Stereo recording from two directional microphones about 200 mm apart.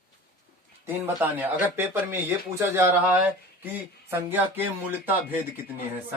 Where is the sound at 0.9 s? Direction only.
10° right (ahead or behind).